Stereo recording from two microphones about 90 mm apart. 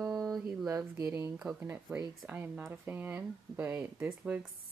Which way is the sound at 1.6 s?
25° right (ahead or behind).